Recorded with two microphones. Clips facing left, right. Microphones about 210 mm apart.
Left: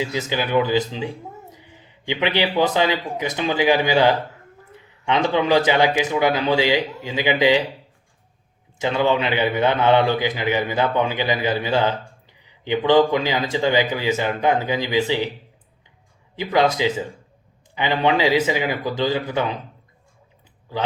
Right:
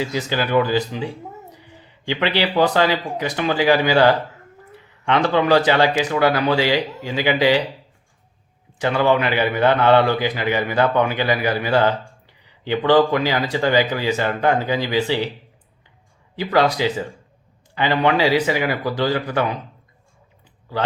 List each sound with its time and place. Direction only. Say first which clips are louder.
0.0 s a man's voice: right 1 dB; 15° left (ahead or behind)
8.8 s a man's voice: right 2 dB; 20° left (ahead or behind)
16.3 s a man's voice: right 1 dB; 20° left (ahead or behind)